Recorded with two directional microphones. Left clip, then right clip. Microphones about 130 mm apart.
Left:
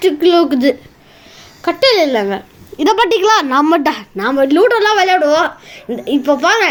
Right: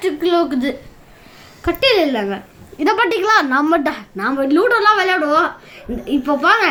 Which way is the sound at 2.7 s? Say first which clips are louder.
Left 4 dB; 35° left (ahead or behind).